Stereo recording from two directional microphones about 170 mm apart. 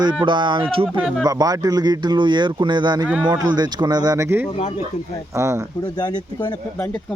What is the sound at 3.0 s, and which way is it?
Speech, 5° right (ahead or behind).